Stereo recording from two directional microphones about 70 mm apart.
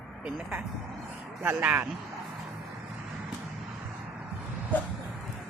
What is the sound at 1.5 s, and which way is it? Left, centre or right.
Speech, right.